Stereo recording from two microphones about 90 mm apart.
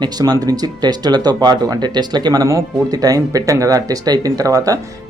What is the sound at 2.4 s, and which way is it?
Speech, 35° right (ahead or behind).